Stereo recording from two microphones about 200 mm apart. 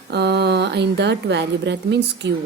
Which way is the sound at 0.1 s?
55° right (ahead or behind).